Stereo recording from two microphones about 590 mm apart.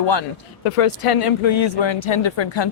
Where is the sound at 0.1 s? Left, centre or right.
Left.